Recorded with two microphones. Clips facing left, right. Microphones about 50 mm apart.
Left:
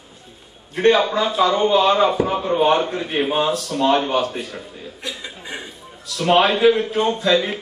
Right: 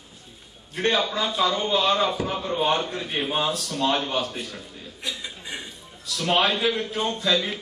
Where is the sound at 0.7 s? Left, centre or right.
Centre.